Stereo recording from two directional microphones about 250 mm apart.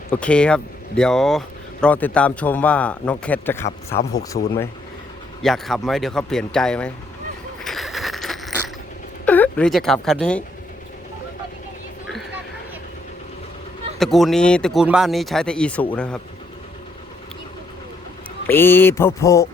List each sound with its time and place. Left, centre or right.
0.1 s speech: centre
4.4 s speech: left
5.4 s speech: centre
7.6 s a sound: centre
9.2 s speech: centre
14.0 s speech: centre
18.4 s a sound: centre